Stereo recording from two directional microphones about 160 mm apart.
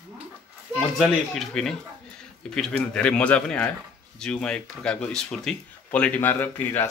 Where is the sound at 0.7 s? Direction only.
Centre (ahead or behind).